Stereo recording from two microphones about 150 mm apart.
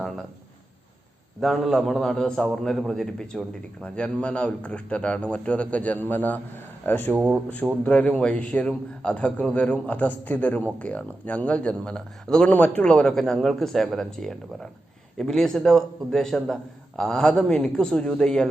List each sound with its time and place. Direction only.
1.4 s a man's voice: centre (ahead or behind)